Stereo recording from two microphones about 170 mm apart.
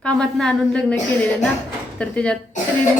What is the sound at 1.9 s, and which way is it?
Speech, 5° left (ahead or behind).